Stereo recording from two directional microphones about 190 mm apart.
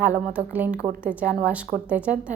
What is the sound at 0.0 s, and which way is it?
A woman's voice, 10° right (ahead or behind).